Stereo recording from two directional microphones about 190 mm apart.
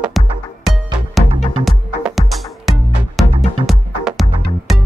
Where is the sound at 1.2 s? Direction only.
Centre (ahead or behind).